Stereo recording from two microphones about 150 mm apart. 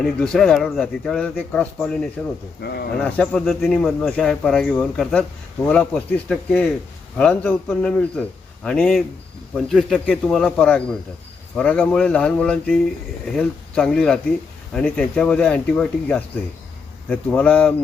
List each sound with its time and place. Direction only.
0.0 s speech: 5° left (ahead or behind)
2.6 s speech: 90° left
3.0 s speech: 5° left (ahead or behind)